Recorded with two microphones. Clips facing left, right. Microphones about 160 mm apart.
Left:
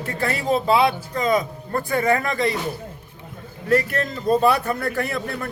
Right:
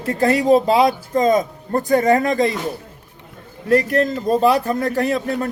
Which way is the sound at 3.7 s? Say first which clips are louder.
Right 5 dB; 40° right (ahead or behind).